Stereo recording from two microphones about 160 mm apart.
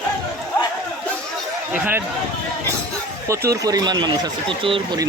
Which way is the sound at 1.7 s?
10° right (ahead or behind).